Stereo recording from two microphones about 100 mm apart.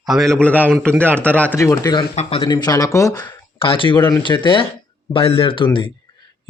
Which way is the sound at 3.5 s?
65° left (ahead or behind).